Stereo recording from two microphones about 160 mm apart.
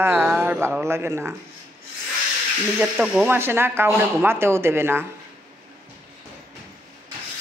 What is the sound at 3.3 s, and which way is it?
Speech, 15° right (ahead or behind).